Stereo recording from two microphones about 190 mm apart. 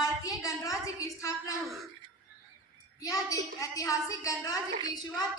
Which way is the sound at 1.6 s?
Centre (ahead or behind).